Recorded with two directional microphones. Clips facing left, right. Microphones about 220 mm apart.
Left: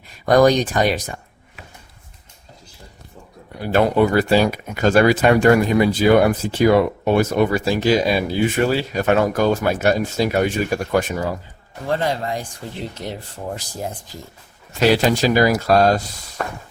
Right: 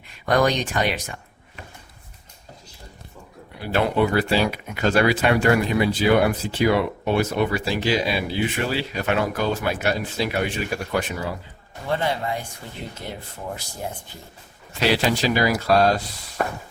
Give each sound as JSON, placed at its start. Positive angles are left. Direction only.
{"t": 0.3, "sound": "speech", "side_deg": 40}
{"t": 3.6, "sound": "speech", "side_deg": 45}
{"t": 14.8, "sound": "speech", "side_deg": 45}
{"t": 16.4, "sound": "walk", "side_deg": -10}